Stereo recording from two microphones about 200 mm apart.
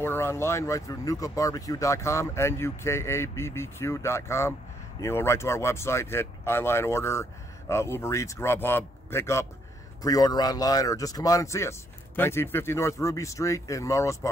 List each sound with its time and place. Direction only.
0.0 s speech: 10° left (ahead or behind)